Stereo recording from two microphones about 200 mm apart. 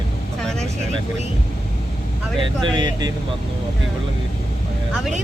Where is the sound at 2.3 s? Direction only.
20° right (ahead or behind).